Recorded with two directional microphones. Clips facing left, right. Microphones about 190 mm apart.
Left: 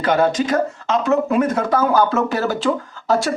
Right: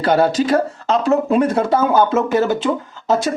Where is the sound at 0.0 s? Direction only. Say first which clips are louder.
Right 2 dB; 35° right (ahead or behind).